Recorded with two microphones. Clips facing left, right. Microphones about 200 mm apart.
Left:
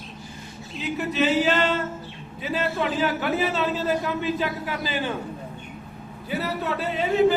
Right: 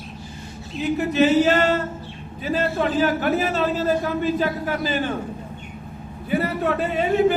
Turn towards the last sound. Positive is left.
turn(degrees=-55)  # may be behind; listen again after turning